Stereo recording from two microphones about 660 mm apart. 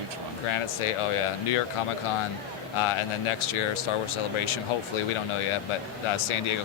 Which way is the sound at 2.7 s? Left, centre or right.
Left.